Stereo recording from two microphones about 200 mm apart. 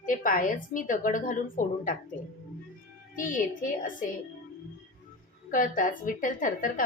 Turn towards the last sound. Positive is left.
turn(degrees=40)  # may be behind; listen again after turning